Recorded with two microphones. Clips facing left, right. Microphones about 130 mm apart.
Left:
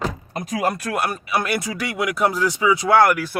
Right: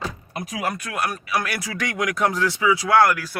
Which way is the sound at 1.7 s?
10° left (ahead or behind).